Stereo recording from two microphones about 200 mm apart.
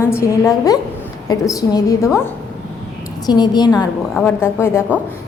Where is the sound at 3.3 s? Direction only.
20° left (ahead or behind).